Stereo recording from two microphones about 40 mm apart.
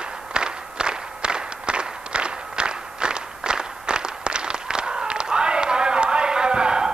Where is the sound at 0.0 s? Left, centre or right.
Right.